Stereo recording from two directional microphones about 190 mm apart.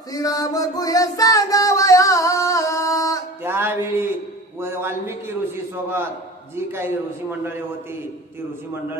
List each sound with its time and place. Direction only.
0.1 s music: 20° left (ahead or behind)
3.4 s music: 10° right (ahead or behind)
4.6 s a sound: 15° right (ahead or behind)
6.5 s a man's voice: 15° right (ahead or behind)